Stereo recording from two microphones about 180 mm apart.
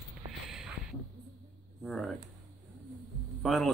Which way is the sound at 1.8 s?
Centre (ahead or behind).